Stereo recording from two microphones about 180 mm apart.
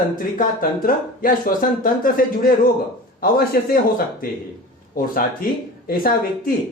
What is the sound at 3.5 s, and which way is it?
Speech, 55° left (ahead or behind).